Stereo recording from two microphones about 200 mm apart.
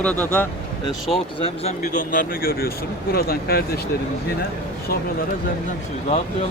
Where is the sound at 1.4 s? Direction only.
35° left (ahead or behind); by 3.6 s 50° left (ahead or behind).